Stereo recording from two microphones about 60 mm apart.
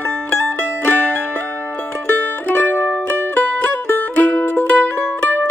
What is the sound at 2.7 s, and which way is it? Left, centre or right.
Music, left.